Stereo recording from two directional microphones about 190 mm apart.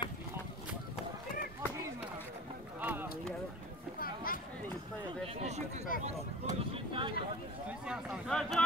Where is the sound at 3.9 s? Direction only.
50° left (ahead or behind).